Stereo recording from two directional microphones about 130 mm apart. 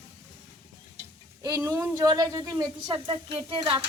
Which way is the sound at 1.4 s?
25° right (ahead or behind).